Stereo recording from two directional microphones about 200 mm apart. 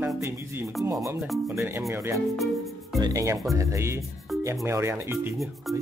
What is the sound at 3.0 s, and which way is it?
Speech, 15° right (ahead or behind).